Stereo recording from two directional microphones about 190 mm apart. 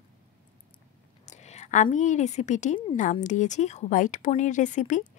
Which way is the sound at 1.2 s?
35° left (ahead or behind).